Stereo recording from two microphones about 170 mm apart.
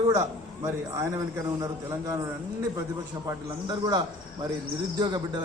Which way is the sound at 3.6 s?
25° right (ahead or behind).